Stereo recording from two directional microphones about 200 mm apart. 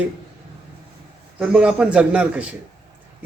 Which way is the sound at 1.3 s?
5° right (ahead or behind).